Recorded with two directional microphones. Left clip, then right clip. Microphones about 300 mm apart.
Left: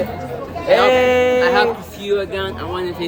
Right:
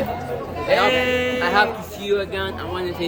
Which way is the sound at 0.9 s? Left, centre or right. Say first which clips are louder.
Left 6 dB; centre.